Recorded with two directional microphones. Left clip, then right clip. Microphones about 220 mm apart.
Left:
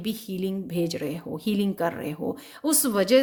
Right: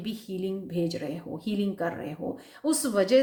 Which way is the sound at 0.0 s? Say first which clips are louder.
Left 3 dB; 45° left (ahead or behind).